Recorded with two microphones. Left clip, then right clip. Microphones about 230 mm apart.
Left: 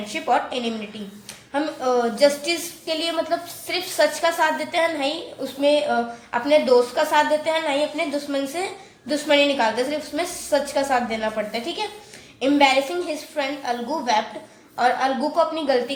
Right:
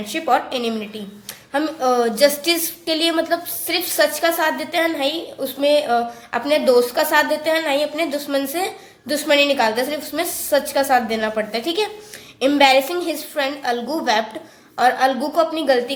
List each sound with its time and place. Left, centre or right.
0.0 s a woman's voice: right
14.8 s a woman's voice: right